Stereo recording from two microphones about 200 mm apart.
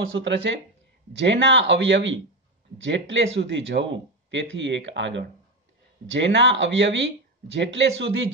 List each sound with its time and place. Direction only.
0.1 s speech: 65° right (ahead or behind)